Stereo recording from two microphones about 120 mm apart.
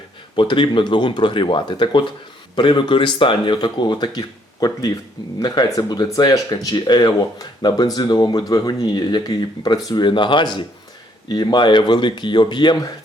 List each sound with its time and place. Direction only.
0.3 s speech: 45° left (ahead or behind)
5.4 s speech: 35° left (ahead or behind)